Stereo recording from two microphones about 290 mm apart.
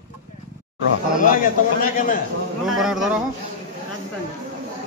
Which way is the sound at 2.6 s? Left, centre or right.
Centre.